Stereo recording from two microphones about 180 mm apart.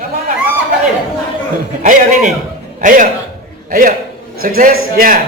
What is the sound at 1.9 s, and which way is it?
A man's voice, 45° right (ahead or behind).